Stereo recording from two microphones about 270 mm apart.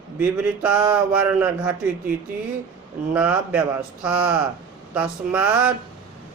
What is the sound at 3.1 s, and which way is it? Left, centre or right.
Speech, centre.